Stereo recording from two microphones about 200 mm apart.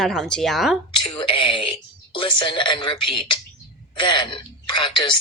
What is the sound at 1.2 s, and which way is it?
Speech, 25° left (ahead or behind).